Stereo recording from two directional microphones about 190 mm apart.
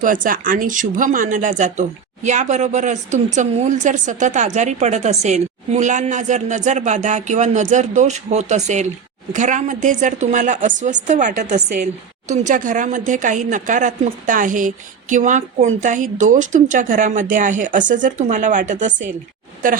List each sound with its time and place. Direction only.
0.0 s speech: 45° right (ahead or behind)